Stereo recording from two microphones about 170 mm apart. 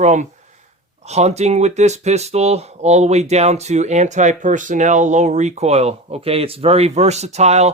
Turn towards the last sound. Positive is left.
turn(degrees=-40)  # may be behind; listen again after turning